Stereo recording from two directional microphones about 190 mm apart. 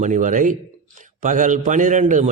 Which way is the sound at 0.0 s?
40° right (ahead or behind).